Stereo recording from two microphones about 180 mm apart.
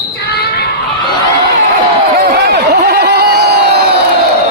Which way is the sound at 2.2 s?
60° right (ahead or behind).